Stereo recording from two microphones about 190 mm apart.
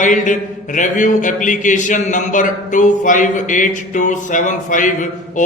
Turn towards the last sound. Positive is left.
turn(degrees=40)  # may be behind; listen again after turning